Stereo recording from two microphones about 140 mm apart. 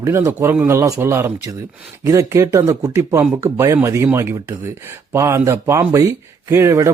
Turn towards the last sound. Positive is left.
turn(degrees=-20)  # may be behind; listen again after turning